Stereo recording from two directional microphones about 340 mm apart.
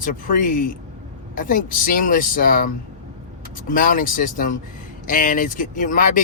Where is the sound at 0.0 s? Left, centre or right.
Left.